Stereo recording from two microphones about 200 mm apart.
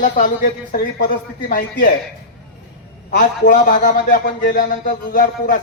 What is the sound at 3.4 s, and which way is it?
A man's voice, 40° left (ahead or behind).